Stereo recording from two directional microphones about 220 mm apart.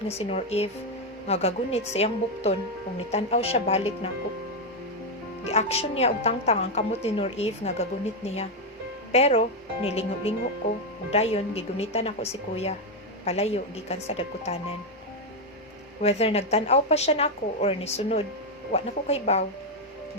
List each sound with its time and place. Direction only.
0.2 s a woman's voice: 25° left (ahead or behind)
5.5 s a woman's voice: 30° left (ahead or behind)
16.0 s a woman's voice: 30° left (ahead or behind)